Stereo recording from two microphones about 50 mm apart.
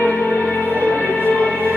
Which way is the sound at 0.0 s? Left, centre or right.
Left.